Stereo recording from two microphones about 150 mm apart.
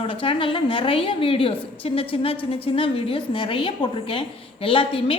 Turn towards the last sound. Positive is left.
turn(degrees=35)  # may be behind; listen again after turning